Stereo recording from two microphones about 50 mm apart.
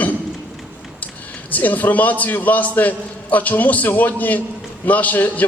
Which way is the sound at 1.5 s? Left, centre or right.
Left.